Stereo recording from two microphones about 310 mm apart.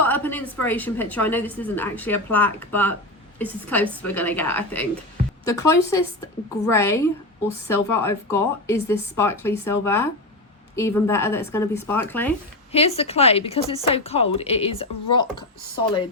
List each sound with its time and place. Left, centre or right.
0.0 s a woman's voice: centre
12.7 s a woman's voice: centre